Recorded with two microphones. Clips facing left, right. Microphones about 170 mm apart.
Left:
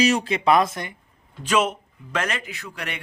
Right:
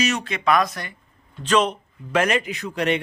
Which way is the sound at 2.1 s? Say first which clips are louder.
Right 7 dB; 15° right (ahead or behind).